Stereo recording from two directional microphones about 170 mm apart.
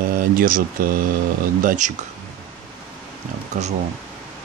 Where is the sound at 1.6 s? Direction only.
45° right (ahead or behind).